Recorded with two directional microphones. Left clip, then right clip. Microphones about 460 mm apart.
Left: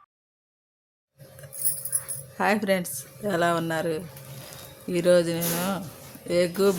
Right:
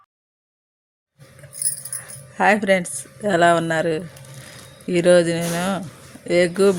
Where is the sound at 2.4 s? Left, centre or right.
Left.